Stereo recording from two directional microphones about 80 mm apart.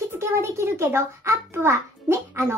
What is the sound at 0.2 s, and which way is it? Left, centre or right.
A child's voice, right.